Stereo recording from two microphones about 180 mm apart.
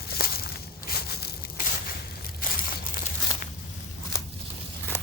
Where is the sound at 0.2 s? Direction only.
55° left (ahead or behind).